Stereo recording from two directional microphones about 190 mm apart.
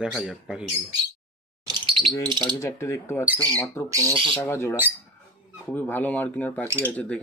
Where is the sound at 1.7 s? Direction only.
25° right (ahead or behind).